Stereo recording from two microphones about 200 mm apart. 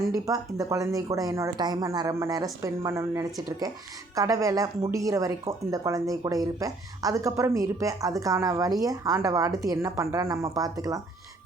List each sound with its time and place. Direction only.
0.3 s speech: 15° right (ahead or behind)